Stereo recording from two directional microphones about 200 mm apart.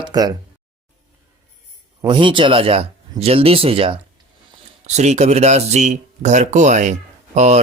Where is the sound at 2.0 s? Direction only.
25° right (ahead or behind).